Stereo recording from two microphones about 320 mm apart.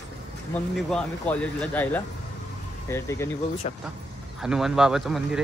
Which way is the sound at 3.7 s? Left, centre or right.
Centre.